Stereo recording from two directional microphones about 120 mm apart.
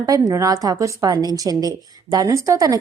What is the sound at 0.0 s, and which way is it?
A woman's voice, 30° right (ahead or behind).